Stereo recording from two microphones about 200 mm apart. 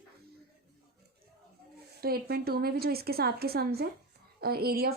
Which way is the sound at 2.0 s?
50° right (ahead or behind).